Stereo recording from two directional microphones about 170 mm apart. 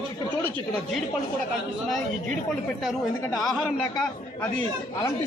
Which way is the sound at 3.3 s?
Centre (ahead or behind).